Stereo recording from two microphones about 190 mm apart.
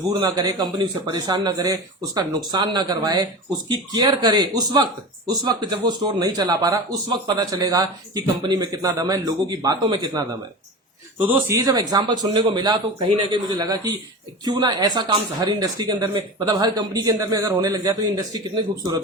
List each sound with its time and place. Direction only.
0.1 s a man's voice: 20° right (ahead or behind)
11.3 s a man's voice: 10° right (ahead or behind)